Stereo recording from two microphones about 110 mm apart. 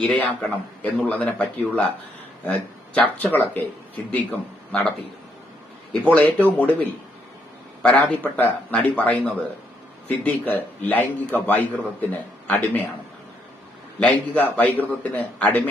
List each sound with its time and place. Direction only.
0.1 s a man's voice: 10° left (ahead or behind)
5.9 s a man's voice: 15° left (ahead or behind)
14.0 s a man's voice: 15° left (ahead or behind)